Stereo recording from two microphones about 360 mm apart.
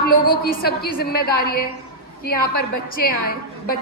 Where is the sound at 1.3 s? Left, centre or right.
Left.